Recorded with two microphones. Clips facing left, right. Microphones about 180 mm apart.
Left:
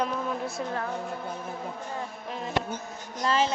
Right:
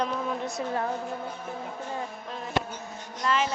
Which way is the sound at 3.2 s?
30° left (ahead or behind).